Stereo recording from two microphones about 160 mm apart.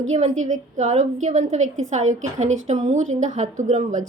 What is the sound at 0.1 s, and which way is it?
A woman's voice, 50° right (ahead or behind).